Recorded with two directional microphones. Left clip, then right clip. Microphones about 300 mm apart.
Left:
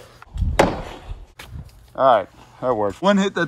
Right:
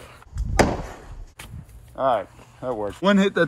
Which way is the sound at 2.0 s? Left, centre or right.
Left.